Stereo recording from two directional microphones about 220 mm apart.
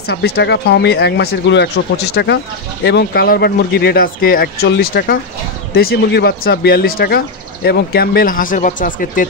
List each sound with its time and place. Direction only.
0.0 s speech: 50° left (ahead or behind)